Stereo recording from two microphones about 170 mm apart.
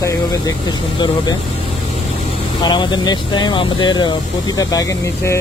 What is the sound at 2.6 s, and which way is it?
Speech, 25° left (ahead or behind).